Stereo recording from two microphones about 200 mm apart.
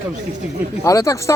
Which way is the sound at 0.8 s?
15° left (ahead or behind).